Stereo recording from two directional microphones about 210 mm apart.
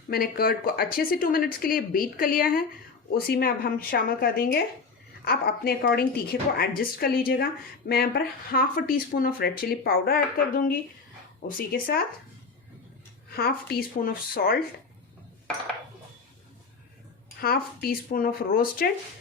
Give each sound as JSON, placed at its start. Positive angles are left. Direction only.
{"t": 0.1, "sound": "speech", "side_deg": 45}
{"t": 13.3, "sound": "speech", "side_deg": 45}
{"t": 17.2, "sound": "speech", "side_deg": 45}